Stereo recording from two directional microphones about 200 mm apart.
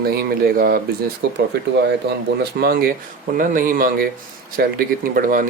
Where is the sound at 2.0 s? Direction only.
55° right (ahead or behind).